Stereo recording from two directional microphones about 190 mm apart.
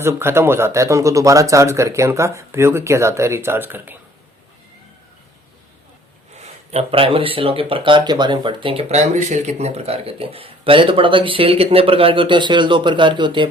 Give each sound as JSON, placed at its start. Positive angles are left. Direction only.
{"t": 0.0, "sound": "speech", "side_deg": -10}
{"t": 6.4, "sound": "speech", "side_deg": -35}